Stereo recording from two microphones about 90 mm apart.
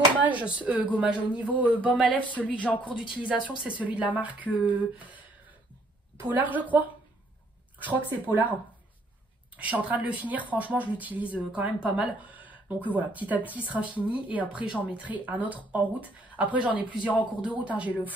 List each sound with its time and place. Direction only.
0.2 s speech: 15° right (ahead or behind)
2.0 s speech: 15° left (ahead or behind)
3.1 s speech: 10° right (ahead or behind)
6.2 s speech: 20° right (ahead or behind)
7.8 s speech: 20° right (ahead or behind)
9.6 s speech: 15° right (ahead or behind)